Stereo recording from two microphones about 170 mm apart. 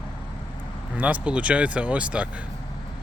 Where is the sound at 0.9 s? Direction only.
10° right (ahead or behind).